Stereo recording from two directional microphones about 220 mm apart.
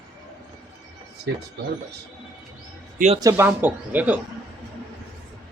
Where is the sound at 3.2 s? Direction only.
10° right (ahead or behind).